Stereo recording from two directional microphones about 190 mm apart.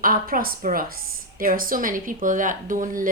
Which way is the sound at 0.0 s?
50° right (ahead or behind).